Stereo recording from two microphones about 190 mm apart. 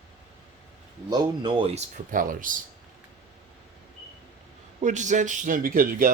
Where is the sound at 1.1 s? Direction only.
25° right (ahead or behind).